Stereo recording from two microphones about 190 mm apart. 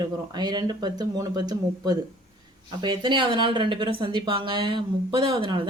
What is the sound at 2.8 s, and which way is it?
Speech, 25° right (ahead or behind).